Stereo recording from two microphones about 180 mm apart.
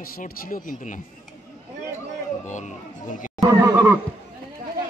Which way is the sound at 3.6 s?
15° right (ahead or behind).